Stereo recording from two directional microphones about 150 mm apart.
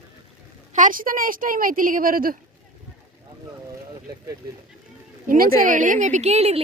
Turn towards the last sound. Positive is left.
turn(degrees=-45)  # may be behind; listen again after turning